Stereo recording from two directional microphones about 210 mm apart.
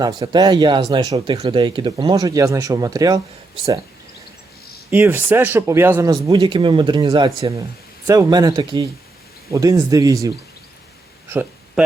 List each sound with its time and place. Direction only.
0.0 s speech: 20° right (ahead or behind)
4.9 s speech: 10° right (ahead or behind)
11.3 s a sound: 10° right (ahead or behind)